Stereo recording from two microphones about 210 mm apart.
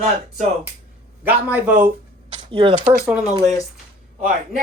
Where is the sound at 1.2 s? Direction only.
10° right (ahead or behind).